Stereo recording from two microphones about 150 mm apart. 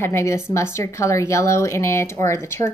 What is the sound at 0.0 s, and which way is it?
A woman's voice, 20° left (ahead or behind).